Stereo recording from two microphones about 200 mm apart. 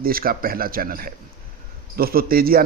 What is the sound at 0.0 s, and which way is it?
A man's voice, 45° right (ahead or behind).